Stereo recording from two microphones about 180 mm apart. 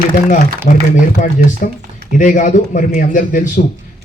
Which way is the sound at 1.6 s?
50° left (ahead or behind).